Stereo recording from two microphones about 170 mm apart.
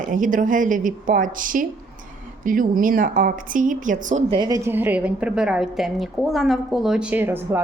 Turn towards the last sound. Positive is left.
turn(degrees=-10)  # may be behind; listen again after turning